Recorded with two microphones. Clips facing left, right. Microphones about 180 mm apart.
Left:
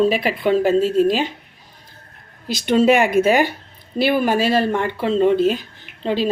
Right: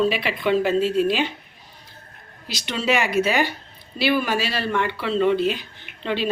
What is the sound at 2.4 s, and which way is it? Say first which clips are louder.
A woman's voice: left 10 dB; 50° left (ahead or behind).